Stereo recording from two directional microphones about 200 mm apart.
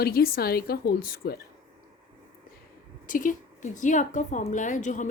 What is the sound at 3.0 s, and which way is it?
A woman's voice, 40° left (ahead or behind).